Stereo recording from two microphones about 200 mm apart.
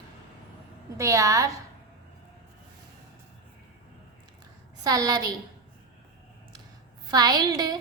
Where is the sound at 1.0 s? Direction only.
15° right (ahead or behind).